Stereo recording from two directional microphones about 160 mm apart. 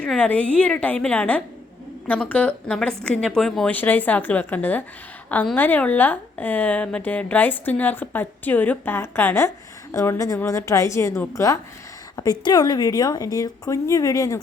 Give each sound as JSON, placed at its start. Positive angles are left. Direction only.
{"t": 0.0, "sound": "a woman's voice", "side_deg": 5}